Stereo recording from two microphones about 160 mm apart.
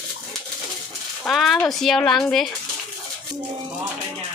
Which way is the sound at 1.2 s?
Centre (ahead or behind).